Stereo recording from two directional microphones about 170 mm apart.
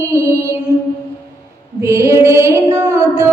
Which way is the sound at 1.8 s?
15° right (ahead or behind).